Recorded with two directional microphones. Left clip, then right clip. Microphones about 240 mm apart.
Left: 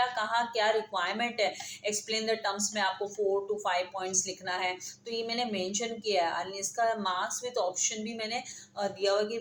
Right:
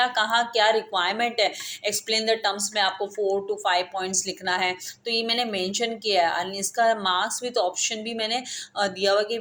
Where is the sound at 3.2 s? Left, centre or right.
Right.